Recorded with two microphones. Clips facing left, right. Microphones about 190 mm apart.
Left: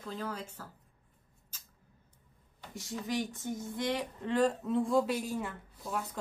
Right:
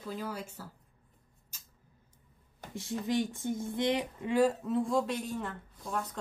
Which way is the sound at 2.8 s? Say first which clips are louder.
Right 4 dB; 25° right (ahead or behind).